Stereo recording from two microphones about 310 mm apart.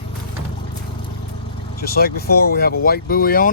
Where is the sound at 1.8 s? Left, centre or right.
Left.